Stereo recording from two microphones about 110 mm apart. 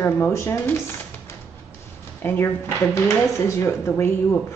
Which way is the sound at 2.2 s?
20° left (ahead or behind).